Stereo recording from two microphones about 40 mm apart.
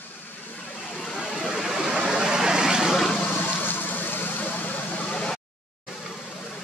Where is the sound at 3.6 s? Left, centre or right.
Left.